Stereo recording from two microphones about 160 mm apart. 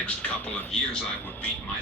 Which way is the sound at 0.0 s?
10° left (ahead or behind).